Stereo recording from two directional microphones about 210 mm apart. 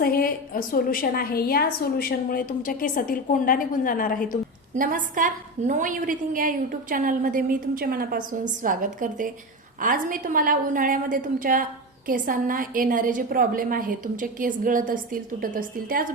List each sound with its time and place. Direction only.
0.0 s a woman's voice: 45° left (ahead or behind)
4.7 s a woman's voice: 40° right (ahead or behind)